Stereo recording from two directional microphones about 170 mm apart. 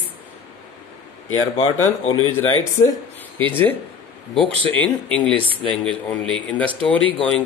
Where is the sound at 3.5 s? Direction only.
10° left (ahead or behind).